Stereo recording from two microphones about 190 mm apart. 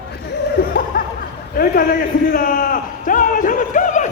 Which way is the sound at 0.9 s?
50° left (ahead or behind).